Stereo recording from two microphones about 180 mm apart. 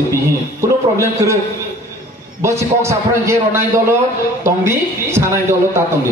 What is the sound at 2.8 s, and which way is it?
A man's voice, 15° right (ahead or behind).